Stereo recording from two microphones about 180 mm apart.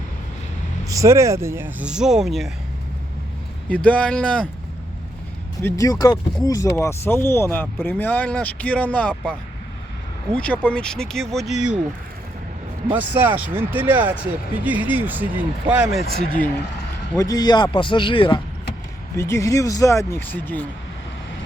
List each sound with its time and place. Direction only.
0.9 s speech: 15° right (ahead or behind); by 2.5 s centre (ahead or behind)
3.7 s speech: 5° left (ahead or behind)
5.6 s speech: 20° left (ahead or behind)
10.3 s speech: 5° left (ahead or behind)
12.9 s speech: 10° right (ahead or behind)
17.2 s a man's voice: 20° left (ahead or behind)
19.1 s speech: 15° left (ahead or behind)